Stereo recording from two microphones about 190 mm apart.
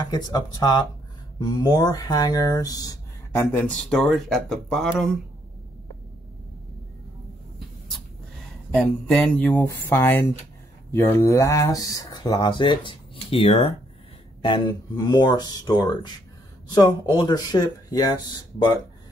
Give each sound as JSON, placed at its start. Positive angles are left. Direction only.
{"t": 0.1, "sound": "speech", "side_deg": 20}
{"t": 8.7, "sound": "speech", "side_deg": 5}